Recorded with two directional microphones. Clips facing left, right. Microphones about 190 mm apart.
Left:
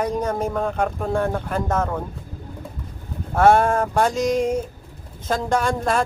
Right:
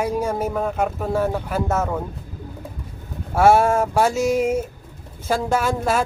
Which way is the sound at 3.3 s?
10° right (ahead or behind).